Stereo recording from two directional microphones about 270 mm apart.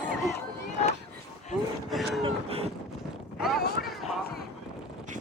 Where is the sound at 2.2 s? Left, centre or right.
Right.